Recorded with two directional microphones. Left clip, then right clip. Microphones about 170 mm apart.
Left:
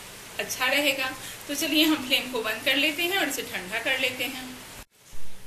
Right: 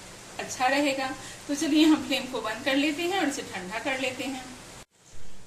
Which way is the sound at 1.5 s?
50° right (ahead or behind).